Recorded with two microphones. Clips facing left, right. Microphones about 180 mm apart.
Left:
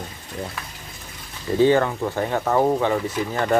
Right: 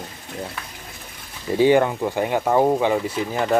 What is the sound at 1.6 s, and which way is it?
Speech, 15° right (ahead or behind).